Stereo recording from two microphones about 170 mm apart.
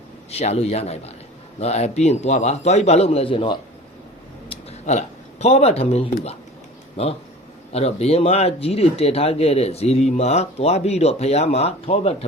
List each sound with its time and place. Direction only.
0.3 s speech: 40° left (ahead or behind)
4.4 s speech: 40° left (ahead or behind)